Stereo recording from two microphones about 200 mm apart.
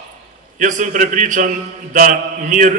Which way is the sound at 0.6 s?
40° right (ahead or behind).